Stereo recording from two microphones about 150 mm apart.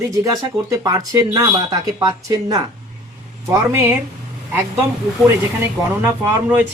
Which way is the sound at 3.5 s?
15° right (ahead or behind).